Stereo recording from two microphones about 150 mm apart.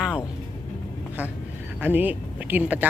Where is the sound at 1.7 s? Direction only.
10° right (ahead or behind).